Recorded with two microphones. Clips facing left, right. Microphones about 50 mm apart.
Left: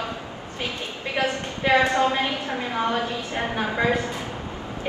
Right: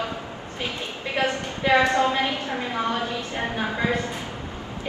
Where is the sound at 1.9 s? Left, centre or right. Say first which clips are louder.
Even; left.